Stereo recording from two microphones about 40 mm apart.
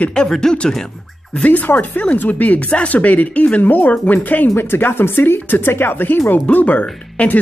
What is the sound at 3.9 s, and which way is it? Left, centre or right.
Speech, left.